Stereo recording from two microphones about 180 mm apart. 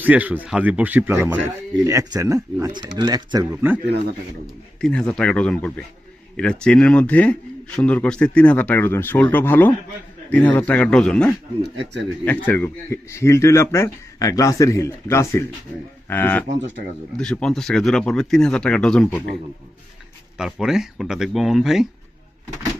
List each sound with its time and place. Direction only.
0.0 s speech: 10° right (ahead or behind)
4.8 s speech: 5° left (ahead or behind)
20.3 s speech: centre (ahead or behind)